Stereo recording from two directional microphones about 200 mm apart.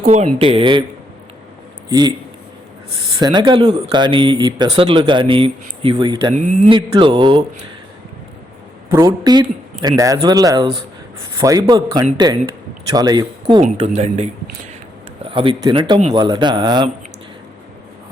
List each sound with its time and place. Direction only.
0.0 s speech: 35° right (ahead or behind)
1.9 s speech: 20° right (ahead or behind)
3.2 s speech: 20° right (ahead or behind)
6.3 s speech: 35° right (ahead or behind)
6.7 s speech: 25° right (ahead or behind)
9.0 s speech: 20° right (ahead or behind)
13.8 s speech: 35° right (ahead or behind)